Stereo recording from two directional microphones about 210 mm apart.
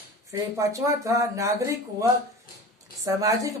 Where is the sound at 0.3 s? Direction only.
15° right (ahead or behind).